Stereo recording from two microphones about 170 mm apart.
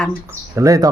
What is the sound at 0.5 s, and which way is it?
Speech, 20° right (ahead or behind).